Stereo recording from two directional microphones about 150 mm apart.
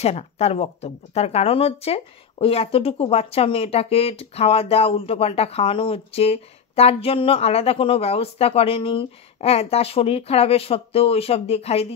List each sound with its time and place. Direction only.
0.0 s speech: 45° left (ahead or behind)